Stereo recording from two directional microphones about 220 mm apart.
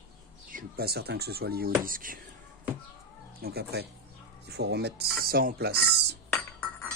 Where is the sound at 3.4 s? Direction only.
45° right (ahead or behind).